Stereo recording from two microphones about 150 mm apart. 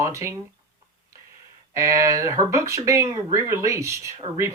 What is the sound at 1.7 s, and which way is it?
Speech, 20° right (ahead or behind).